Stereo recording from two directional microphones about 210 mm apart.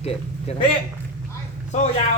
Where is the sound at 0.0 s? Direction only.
30° left (ahead or behind).